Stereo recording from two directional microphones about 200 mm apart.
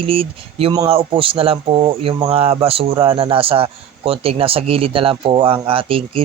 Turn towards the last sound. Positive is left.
turn(degrees=-25)  # may be behind; listen again after turning